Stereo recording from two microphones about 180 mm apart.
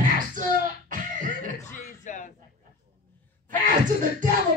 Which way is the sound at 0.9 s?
50° right (ahead or behind).